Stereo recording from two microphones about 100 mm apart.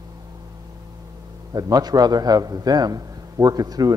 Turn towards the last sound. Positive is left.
turn(degrees=-40)  # may be behind; listen again after turning